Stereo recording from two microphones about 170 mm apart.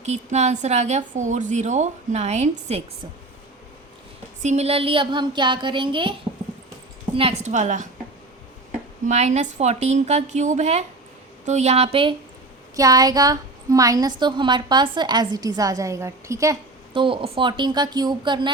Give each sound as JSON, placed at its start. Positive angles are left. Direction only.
{"t": 0.0, "sound": "a woman's voice", "side_deg": -40}
{"t": 4.4, "sound": "a woman's voice", "side_deg": -40}
{"t": 7.2, "sound": "a woman's voice", "side_deg": -35}
{"t": 9.0, "sound": "a woman's voice", "side_deg": -40}
{"t": 12.7, "sound": "a woman's voice", "side_deg": -20}
{"t": 16.9, "sound": "a woman's voice", "side_deg": -30}